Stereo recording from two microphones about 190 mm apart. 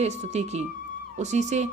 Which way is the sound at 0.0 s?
35° right (ahead or behind).